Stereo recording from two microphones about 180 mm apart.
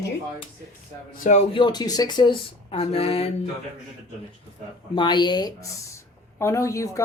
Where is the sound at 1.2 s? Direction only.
40° left (ahead or behind).